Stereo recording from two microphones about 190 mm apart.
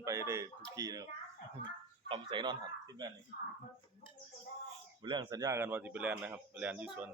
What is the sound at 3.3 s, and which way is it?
Speech, 45° left (ahead or behind).